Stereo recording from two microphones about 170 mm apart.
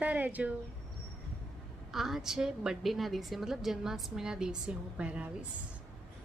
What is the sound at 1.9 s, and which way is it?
A woman's voice, centre (ahead or behind).